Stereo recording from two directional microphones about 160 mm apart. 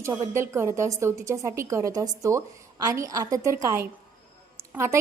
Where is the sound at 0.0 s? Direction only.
15° right (ahead or behind).